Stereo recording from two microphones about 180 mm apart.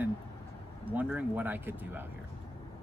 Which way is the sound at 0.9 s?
10° right (ahead or behind).